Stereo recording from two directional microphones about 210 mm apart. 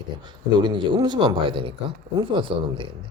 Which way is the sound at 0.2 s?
20° right (ahead or behind).